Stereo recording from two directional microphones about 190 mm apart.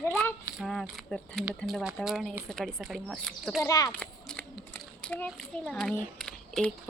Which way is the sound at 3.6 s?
20° left (ahead or behind).